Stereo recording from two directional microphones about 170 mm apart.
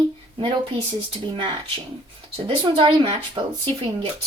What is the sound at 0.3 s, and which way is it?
Speech, 30° right (ahead or behind).